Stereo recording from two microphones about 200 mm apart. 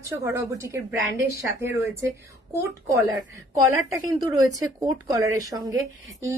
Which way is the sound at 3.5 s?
20° right (ahead or behind).